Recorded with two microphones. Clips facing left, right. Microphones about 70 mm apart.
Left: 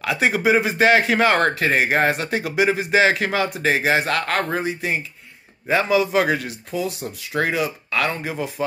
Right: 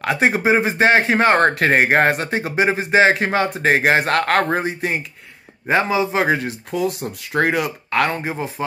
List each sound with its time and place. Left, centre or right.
0.0 s a man's voice: right
1.5 s speech: right
2.2 s a man's voice: right
5.9 s a man's voice: right
6.7 s speech: right